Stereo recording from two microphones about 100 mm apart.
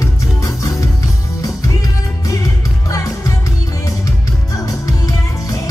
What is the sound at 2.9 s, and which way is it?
Music, 35° left (ahead or behind).